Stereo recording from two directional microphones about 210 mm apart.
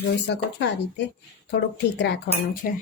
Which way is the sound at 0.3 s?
55° left (ahead or behind).